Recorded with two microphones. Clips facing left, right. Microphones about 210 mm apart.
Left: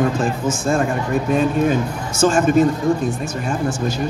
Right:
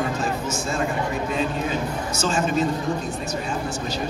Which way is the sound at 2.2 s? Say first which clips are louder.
Left 9 dB; 50° left (ahead or behind).